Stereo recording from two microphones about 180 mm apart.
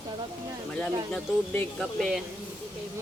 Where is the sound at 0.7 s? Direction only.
5° left (ahead or behind).